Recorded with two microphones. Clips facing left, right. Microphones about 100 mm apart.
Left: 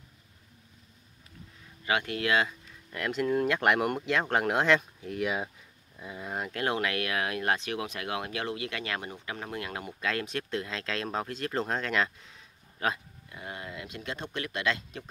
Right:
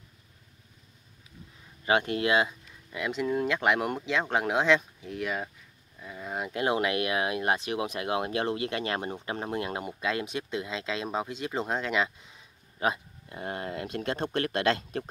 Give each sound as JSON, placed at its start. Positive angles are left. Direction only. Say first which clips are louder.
{"t": 1.9, "sound": "speech", "louder": "right 3 dB", "side_deg": -30}
{"t": 3.1, "sound": "speech", "louder": "left 1 dB", "side_deg": 0}
{"t": 6.2, "sound": "a sound", "louder": "right 1 dB", "side_deg": -5}
{"t": 6.5, "sound": "speech", "louder": "right 4 dB", "side_deg": -15}
{"t": 13.3, "sound": "speech", "louder": "right 6 dB", "side_deg": -40}